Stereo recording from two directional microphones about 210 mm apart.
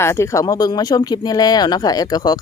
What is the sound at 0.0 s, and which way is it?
Speech, 15° left (ahead or behind).